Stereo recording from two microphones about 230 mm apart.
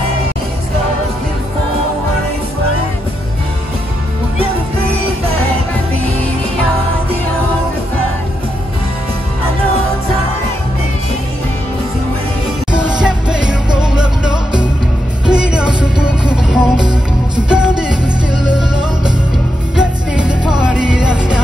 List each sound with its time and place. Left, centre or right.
12.7 s music: centre